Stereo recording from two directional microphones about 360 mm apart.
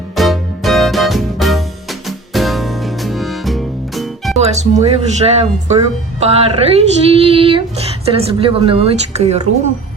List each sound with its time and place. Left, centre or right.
0.2 s music: centre
4.4 s female singing: centre